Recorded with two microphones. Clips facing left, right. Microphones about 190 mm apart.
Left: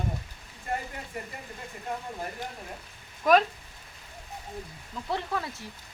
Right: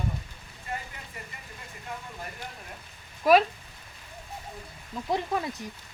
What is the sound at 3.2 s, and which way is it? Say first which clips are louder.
Speech: right 1 dB; 5° right (ahead or behind).